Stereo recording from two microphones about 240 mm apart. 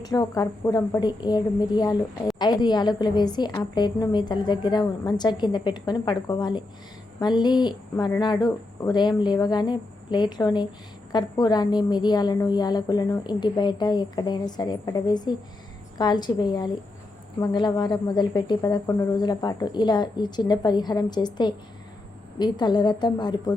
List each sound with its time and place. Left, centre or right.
0.0 s a woman's voice: centre